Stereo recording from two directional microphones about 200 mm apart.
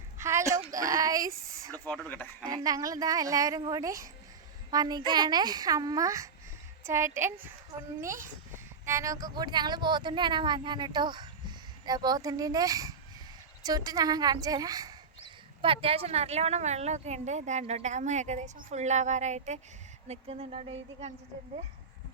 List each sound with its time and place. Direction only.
0.2 s a sound: 15° right (ahead or behind)
1.9 s speech: 10° left (ahead or behind)
2.4 s speech: 20° right (ahead or behind)